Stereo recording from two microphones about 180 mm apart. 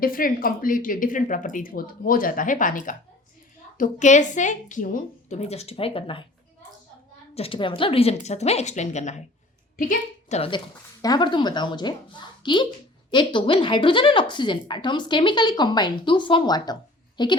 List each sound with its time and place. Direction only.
0.0 s a woman's voice: 50° left (ahead or behind); by 6.2 s 30° left (ahead or behind)
7.3 s a woman's voice: 30° left (ahead or behind)
11.0 s speech: 25° left (ahead or behind)